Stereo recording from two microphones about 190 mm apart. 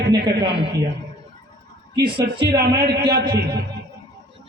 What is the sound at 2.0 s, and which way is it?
Speech, 60° right (ahead or behind).